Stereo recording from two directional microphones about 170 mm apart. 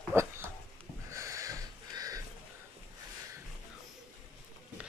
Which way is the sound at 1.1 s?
20° right (ahead or behind).